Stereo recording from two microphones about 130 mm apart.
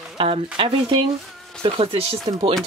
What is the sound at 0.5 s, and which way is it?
Speech, 45° right (ahead or behind).